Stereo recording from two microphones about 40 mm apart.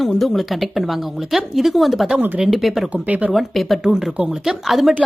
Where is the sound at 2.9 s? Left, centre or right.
Right.